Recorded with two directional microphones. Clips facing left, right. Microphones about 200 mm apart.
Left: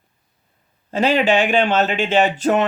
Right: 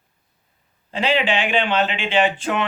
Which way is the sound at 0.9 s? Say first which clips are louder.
Left 4 dB; 45° left (ahead or behind).